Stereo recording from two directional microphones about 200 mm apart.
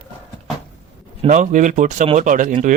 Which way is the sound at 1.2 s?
40° right (ahead or behind).